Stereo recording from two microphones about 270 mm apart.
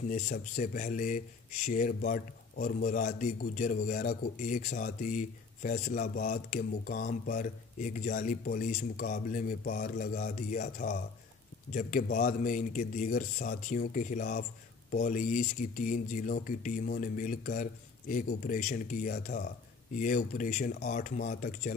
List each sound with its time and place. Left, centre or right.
0.1 s a man's voice: left